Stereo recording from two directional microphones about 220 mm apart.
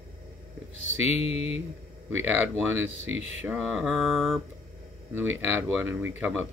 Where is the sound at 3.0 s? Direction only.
60° right (ahead or behind).